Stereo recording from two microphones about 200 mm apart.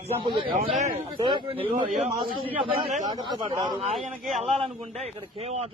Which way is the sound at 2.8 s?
35° right (ahead or behind).